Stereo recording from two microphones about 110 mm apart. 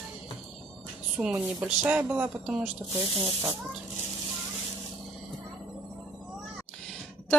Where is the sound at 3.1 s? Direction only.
45° right (ahead or behind).